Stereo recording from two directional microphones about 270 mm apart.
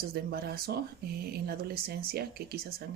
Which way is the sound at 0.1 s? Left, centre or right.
Right.